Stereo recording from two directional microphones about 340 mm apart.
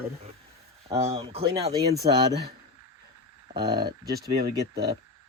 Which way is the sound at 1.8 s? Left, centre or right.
Right.